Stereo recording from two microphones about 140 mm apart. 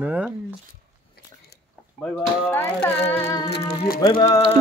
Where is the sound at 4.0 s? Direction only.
30° left (ahead or behind).